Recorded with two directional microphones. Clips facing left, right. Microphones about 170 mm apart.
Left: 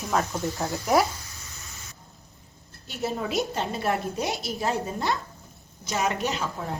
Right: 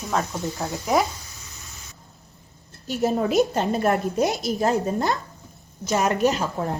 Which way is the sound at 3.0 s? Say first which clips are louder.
Right 7 dB; 45° right (ahead or behind).